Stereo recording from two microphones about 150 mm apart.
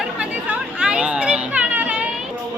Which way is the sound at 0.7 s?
5° right (ahead or behind).